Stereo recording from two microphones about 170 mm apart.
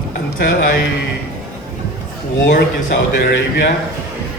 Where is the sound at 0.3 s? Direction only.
60° left (ahead or behind).